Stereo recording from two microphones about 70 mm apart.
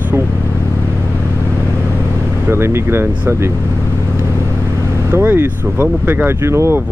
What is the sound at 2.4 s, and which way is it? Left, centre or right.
Speech, right.